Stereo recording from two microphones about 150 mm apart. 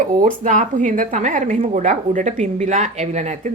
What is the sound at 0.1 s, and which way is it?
A woman's voice, 60° right (ahead or behind).